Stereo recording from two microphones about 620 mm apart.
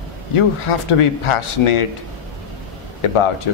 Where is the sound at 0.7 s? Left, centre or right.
Left.